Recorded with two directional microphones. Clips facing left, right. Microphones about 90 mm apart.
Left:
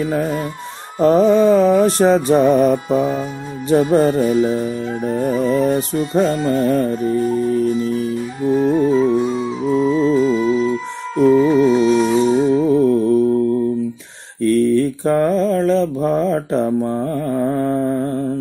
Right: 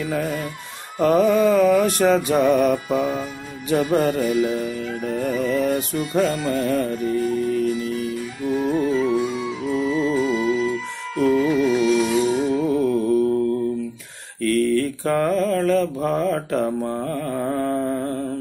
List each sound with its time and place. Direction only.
0.0 s speech: 30° left (ahead or behind)
0.9 s mantra: 30° left (ahead or behind)
14.4 s mantra: 20° left (ahead or behind)
16.6 s mantra: 10° left (ahead or behind)
17.0 s music: 20° left (ahead or behind)